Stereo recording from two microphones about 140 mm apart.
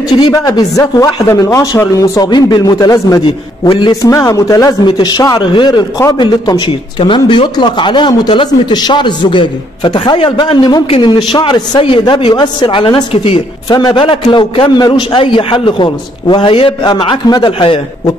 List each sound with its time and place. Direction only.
0.1 s speech: 30° left (ahead or behind)
3.6 s a man's voice: 40° left (ahead or behind)
4.0 s a man's voice: 25° left (ahead or behind); by 13.4 s 40° left (ahead or behind)
13.7 s a man's voice: 30° left (ahead or behind)